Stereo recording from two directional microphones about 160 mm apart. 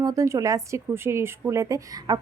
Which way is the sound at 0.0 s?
20° right (ahead or behind).